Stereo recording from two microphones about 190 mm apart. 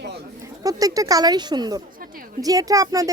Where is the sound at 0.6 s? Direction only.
20° right (ahead or behind).